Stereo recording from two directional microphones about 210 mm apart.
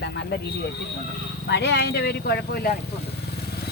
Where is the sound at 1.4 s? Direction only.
55° left (ahead or behind).